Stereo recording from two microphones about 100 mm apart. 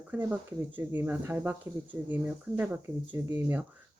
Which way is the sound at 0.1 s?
15° right (ahead or behind).